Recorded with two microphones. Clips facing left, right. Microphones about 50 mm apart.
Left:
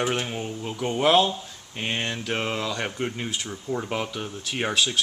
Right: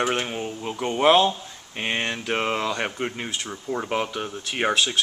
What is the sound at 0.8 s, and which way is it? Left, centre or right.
Speech, right.